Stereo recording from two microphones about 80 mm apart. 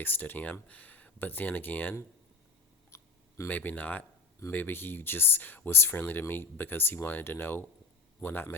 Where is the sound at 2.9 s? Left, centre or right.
Left.